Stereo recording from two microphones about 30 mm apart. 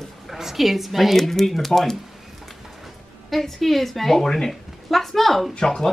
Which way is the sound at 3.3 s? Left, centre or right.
Centre.